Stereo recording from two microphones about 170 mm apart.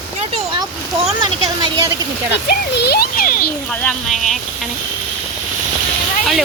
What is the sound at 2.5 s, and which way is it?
Speech, 70° left (ahead or behind).